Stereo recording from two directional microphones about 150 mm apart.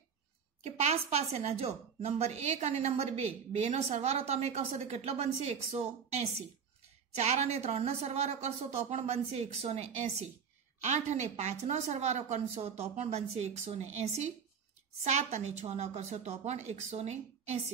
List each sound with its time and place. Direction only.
0.7 s a woman's voice: 45° right (ahead or behind)
15.0 s a woman's voice: 50° right (ahead or behind)